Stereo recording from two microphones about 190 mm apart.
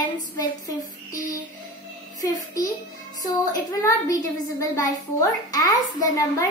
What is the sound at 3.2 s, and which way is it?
A child's voice, 20° left (ahead or behind).